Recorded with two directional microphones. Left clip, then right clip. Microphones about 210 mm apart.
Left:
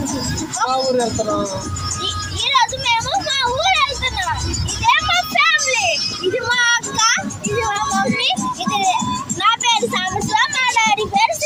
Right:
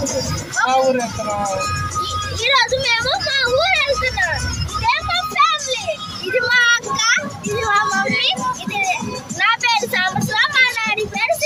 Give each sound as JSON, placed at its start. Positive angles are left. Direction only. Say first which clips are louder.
{"t": 2.4, "sound": "vehicle", "louder": "right 1 dB", "side_deg": -5}
{"t": 4.9, "sound": "music", "louder": "left 4 dB", "side_deg": 5}
{"t": 6.5, "sound": "child singing", "louder": "right 2 dB", "side_deg": 20}
{"t": 7.7, "sound": "music", "louder": "right 5 dB", "side_deg": 10}
{"t": 9.4, "sound": "a sound", "louder": "even", "side_deg": -5}